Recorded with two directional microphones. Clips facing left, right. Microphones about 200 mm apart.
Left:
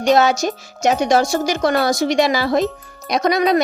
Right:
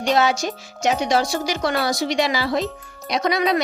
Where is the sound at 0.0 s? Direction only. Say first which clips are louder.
Left 5 dB; 45° left (ahead or behind).